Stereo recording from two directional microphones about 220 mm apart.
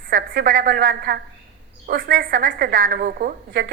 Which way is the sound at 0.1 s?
40° right (ahead or behind).